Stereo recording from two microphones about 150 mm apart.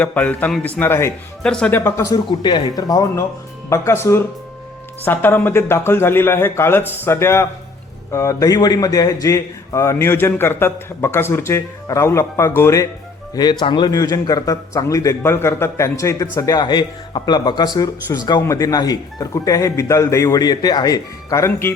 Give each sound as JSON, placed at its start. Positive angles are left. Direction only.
{"t": 0.0, "sound": "a man's voice", "side_deg": 10}
{"t": 1.4, "sound": "a man's voice", "side_deg": 5}